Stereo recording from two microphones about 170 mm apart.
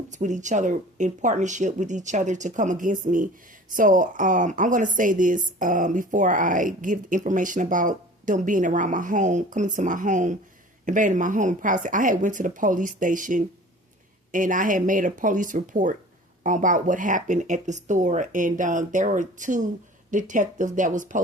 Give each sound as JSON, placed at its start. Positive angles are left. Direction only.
{"t": 0.1, "sound": "a woman's voice", "side_deg": -45}